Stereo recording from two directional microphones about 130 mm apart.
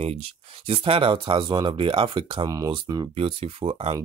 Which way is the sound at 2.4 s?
25° right (ahead or behind).